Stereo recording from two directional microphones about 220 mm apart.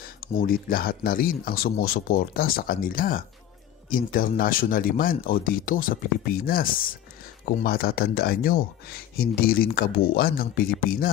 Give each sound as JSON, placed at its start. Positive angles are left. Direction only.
{"t": 0.0, "sound": "speech", "side_deg": 40}